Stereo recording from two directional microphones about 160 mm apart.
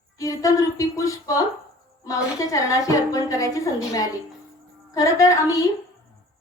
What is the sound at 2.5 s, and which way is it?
A woman's voice, 20° left (ahead or behind).